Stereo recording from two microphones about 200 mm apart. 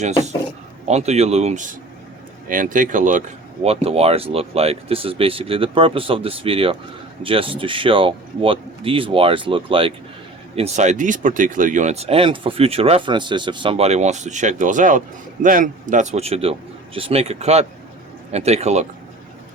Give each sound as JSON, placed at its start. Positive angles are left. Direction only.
{"t": 0.9, "sound": "speech", "side_deg": -35}